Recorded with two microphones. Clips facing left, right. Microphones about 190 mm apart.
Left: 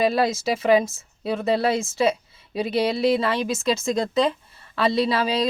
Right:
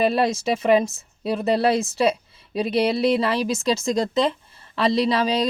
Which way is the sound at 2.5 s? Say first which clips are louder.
Right 2 dB; centre (ahead or behind).